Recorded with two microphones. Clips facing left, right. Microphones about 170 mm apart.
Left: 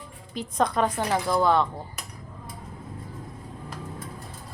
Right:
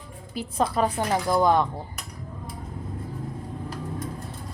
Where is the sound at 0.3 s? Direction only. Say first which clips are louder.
Even; 5° right (ahead or behind).